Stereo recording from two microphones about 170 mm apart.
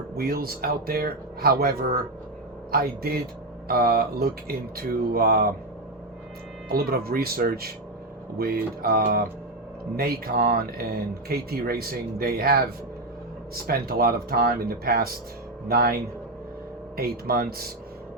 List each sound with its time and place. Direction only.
0.2 s speech: 65° right (ahead or behind)
6.7 s speech: 65° right (ahead or behind)
17.0 s speech: 65° right (ahead or behind)